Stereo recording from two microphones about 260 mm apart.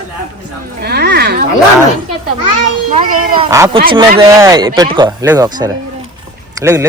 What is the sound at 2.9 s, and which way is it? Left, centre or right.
Speech, right.